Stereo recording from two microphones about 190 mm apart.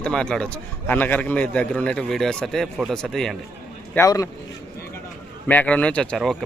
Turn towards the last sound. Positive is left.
turn(degrees=0)  # may be behind; listen again after turning